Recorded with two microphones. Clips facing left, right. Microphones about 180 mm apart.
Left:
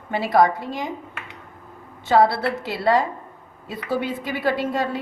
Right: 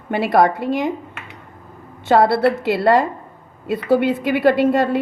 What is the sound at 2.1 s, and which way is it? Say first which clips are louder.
A woman's voice: right 4 dB; 60° right (ahead or behind).